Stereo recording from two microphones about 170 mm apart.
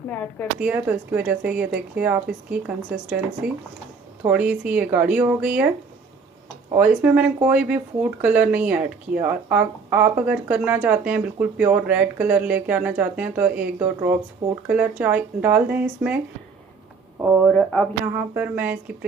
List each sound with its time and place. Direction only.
0.1 s speech: 10° left (ahead or behind)
0.6 s speech: 10° right (ahead or behind)
6.7 s speech: 10° right (ahead or behind)
17.4 s speech: 5° left (ahead or behind)
18.0 s speech: 10° right (ahead or behind)